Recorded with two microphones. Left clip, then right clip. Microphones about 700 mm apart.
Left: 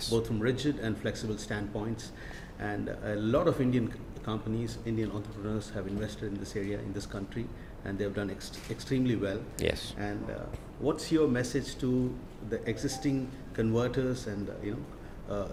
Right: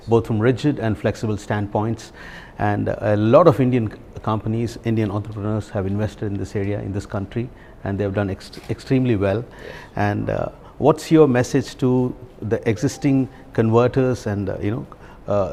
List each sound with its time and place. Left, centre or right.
0.1 s speech: right